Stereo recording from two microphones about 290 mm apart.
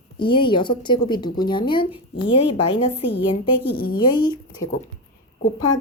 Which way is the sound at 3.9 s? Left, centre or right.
Centre.